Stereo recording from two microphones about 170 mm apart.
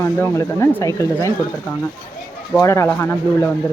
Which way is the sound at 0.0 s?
15° left (ahead or behind).